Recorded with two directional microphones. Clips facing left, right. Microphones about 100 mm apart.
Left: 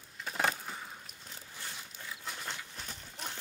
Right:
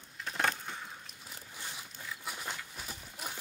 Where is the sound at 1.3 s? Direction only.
15° right (ahead or behind).